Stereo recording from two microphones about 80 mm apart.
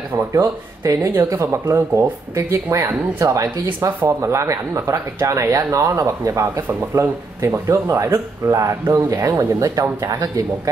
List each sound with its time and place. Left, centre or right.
0.3 s speech: right